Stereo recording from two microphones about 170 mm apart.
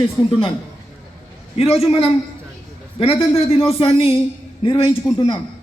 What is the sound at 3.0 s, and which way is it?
A man's voice, 35° left (ahead or behind).